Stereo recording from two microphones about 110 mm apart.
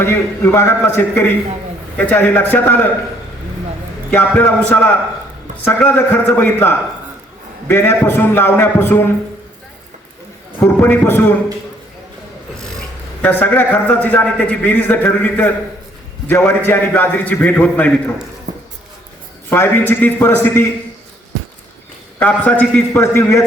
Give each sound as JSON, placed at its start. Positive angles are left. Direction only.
{"t": 0.0, "sound": "a man's voice", "side_deg": 20}
{"t": 4.1, "sound": "a man's voice", "side_deg": 15}
{"t": 10.6, "sound": "a man's voice", "side_deg": 15}
{"t": 12.5, "sound": "filing", "side_deg": 5}
{"t": 13.2, "sound": "a man's voice", "side_deg": 15}
{"t": 19.5, "sound": "a man's voice", "side_deg": 20}
{"t": 22.2, "sound": "a man's voice", "side_deg": 15}